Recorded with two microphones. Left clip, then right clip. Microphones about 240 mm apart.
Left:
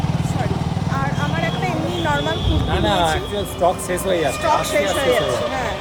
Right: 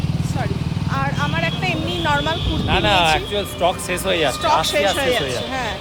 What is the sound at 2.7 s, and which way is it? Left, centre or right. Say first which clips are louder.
Speech: right 3 dB; right.